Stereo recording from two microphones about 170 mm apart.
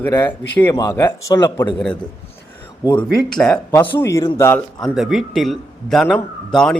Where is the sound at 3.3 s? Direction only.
5° left (ahead or behind).